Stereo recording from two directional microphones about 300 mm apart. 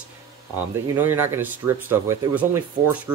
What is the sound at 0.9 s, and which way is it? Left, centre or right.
Speech, centre.